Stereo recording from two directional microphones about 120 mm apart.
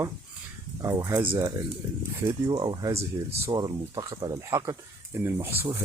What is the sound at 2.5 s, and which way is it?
Speech, 40° right (ahead or behind).